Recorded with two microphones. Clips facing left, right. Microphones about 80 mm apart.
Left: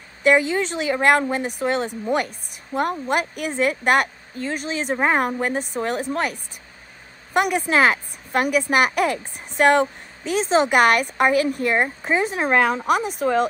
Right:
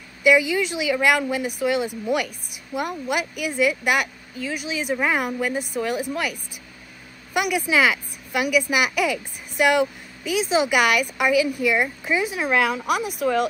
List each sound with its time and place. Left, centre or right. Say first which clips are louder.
0.2 s speech: even; left
7.3 s speech: left 2 dB; left
12.8 s speech: left 2 dB; centre